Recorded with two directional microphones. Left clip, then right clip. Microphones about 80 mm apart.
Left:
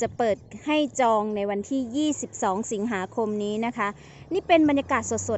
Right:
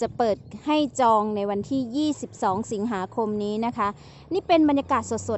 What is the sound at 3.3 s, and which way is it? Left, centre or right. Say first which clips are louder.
Speech: right 1 dB; right.